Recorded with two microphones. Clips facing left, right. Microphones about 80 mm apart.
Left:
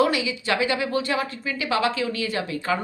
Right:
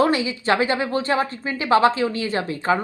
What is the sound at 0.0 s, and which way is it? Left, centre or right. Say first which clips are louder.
Speech: right 2 dB; right.